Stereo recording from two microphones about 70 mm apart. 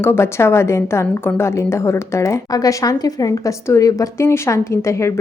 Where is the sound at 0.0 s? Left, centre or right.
Left.